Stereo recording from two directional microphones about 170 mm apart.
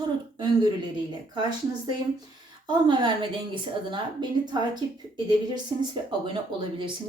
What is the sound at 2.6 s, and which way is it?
Speech, 30° right (ahead or behind).